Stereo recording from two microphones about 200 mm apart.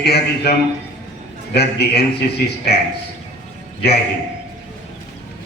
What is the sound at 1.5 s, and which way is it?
Speech, 55° left (ahead or behind).